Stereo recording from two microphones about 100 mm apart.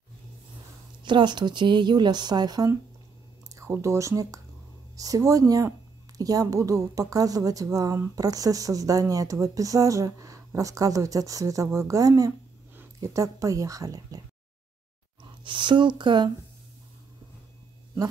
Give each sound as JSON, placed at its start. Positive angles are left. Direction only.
{"t": 1.0, "sound": "speech", "side_deg": -50}
{"t": 3.8, "sound": "speech", "side_deg": -30}
{"t": 15.4, "sound": "speech", "side_deg": -55}